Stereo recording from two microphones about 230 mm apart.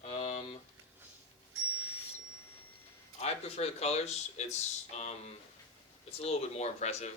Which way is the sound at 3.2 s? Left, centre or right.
Left.